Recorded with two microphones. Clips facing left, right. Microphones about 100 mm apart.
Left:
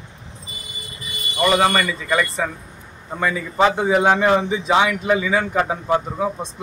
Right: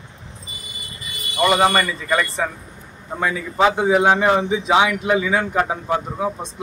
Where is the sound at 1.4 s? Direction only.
10° right (ahead or behind).